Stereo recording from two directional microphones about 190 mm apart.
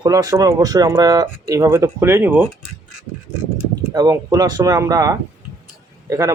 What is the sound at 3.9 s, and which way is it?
Speech, 20° right (ahead or behind).